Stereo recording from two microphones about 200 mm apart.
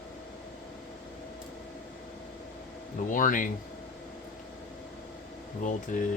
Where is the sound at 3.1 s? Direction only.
40° left (ahead or behind).